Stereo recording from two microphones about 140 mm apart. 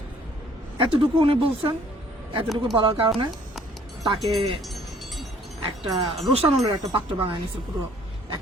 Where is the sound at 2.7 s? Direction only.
35° right (ahead or behind).